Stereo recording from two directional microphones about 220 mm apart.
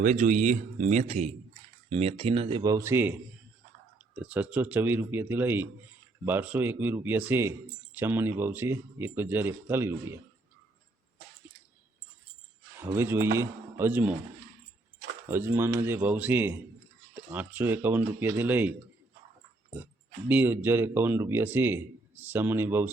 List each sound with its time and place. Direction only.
0.0 s speech: 35° right (ahead or behind); by 10.2 s 10° right (ahead or behind)
12.8 s speech: 10° right (ahead or behind)
15.3 s speech: 10° right (ahead or behind)
19.7 s speech: 10° right (ahead or behind)